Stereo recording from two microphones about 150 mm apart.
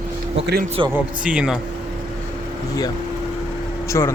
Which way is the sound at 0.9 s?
10° right (ahead or behind).